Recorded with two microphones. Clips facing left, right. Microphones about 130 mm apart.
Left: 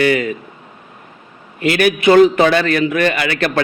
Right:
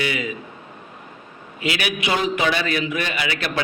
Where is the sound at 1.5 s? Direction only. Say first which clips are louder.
Left 10 dB; 50° left (ahead or behind).